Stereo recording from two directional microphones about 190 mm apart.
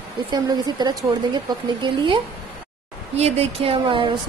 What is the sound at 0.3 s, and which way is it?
Speech, 20° right (ahead or behind).